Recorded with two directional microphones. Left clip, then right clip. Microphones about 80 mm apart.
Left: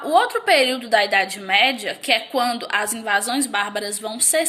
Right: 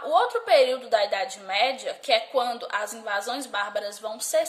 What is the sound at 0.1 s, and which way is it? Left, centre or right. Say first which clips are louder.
A woman's voice: left 4 dB; right.